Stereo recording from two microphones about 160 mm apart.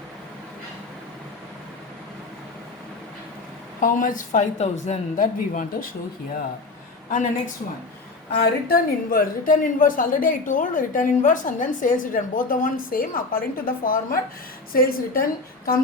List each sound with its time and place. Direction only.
3.8 s speech: 55° left (ahead or behind)
7.1 s a woman's voice: 55° left (ahead or behind)
8.6 s a woman's voice: 65° left (ahead or behind)